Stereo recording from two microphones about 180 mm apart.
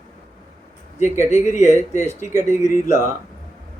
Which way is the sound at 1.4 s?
40° left (ahead or behind).